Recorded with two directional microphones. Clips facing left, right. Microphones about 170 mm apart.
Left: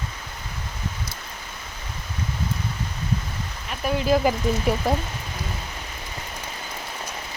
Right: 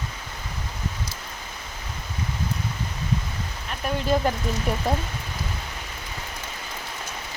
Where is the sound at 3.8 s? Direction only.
5° left (ahead or behind).